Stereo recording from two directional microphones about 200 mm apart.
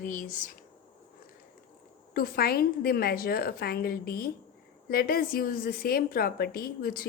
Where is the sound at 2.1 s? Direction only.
50° left (ahead or behind).